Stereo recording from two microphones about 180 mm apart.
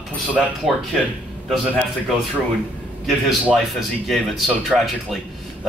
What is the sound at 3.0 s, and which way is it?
Speech, centre (ahead or behind).